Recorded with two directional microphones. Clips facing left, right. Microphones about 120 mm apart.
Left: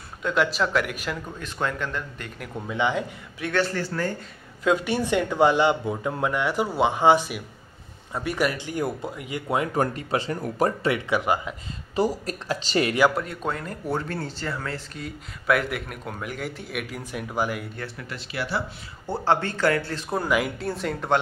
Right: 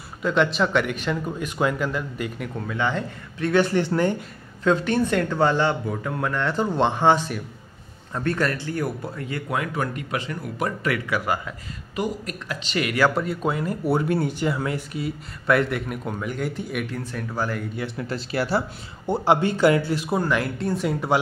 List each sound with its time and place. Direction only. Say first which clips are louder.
0.2 s speech: right 2 dB; centre (ahead or behind)
1.1 s speech: right 7 dB; 10° right (ahead or behind)
2.6 s speech: left 1 dB; 15° left (ahead or behind)
3.5 s speech: right 5 dB; 15° right (ahead or behind)
4.6 s speech: right 2 dB; 10° left (ahead or behind)
9.8 s speech: left 3 dB; 30° left (ahead or behind)
10.9 s speech: left 1 dB; 20° left (ahead or behind)
11.9 s speech: left 3 dB; 30° left (ahead or behind)
13.1 s speech: right 4 dB; centre (ahead or behind)
15.0 s speech: right 1 dB; centre (ahead or behind)
17.9 s speech: right 8 dB; 35° right (ahead or behind)
19.0 s speech: right 4 dB; 15° right (ahead or behind)
20.2 s speech: left 3 dB; 5° left (ahead or behind)